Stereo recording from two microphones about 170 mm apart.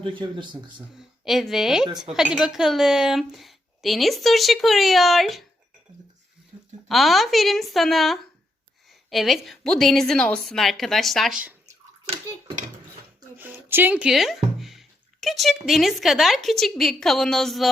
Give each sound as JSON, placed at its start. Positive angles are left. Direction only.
{"t": 0.0, "sound": "speech", "side_deg": -30}
{"t": 0.9, "sound": "a woman's voice", "side_deg": 0}
{"t": 6.8, "sound": "speech", "side_deg": 0}
{"t": 13.3, "sound": "speech", "side_deg": -10}